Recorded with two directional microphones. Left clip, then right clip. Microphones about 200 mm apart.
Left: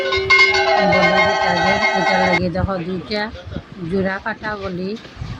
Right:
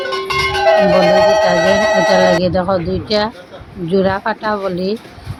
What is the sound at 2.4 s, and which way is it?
Speech, 20° right (ahead or behind).